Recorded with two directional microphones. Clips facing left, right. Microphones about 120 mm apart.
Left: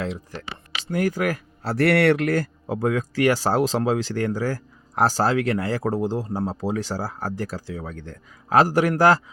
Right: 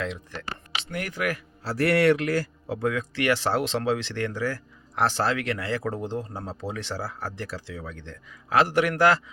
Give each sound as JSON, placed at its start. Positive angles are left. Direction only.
{"t": 0.0, "sound": "a man's voice", "side_deg": 35}
{"t": 1.6, "sound": "a man's voice", "side_deg": 65}